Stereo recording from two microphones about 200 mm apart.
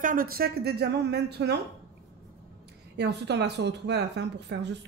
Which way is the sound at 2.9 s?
60° right (ahead or behind).